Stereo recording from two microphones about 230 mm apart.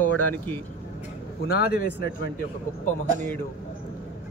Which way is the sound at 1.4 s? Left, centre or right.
Left.